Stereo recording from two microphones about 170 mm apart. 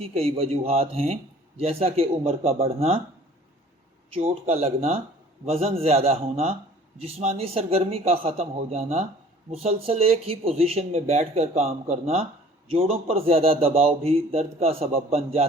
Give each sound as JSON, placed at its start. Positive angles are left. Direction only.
{"t": 0.0, "sound": "a man's voice", "side_deg": -35}
{"t": 4.1, "sound": "a man's voice", "side_deg": -35}